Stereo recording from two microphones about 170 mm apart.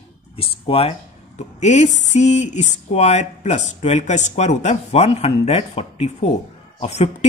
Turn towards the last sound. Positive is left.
turn(degrees=40)  # may be behind; listen again after turning